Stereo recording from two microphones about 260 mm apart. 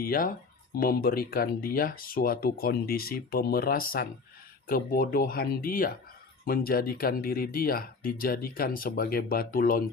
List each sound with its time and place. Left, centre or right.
0.0 s speech: left